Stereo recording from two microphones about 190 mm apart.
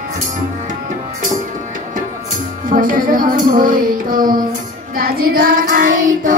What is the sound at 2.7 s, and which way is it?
Child singing, 45° right (ahead or behind).